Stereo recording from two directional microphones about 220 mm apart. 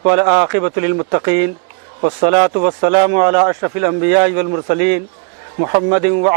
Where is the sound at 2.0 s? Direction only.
25° right (ahead or behind).